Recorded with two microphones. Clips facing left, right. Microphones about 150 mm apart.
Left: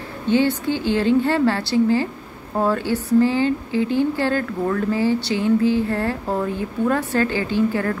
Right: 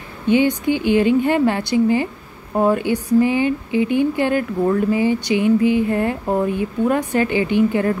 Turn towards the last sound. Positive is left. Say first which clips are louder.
# right 3 dB
turn(degrees=-20)  # may be behind; listen again after turning